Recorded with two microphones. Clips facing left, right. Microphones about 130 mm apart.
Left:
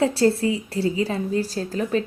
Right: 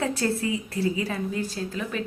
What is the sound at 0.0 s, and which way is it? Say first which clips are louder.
A woman's voice: left 7 dB; 30° left (ahead or behind).